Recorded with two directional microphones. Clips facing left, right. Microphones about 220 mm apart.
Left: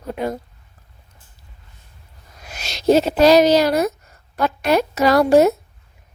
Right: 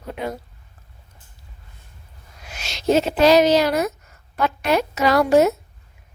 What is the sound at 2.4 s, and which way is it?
A woman's voice, 40° left (ahead or behind).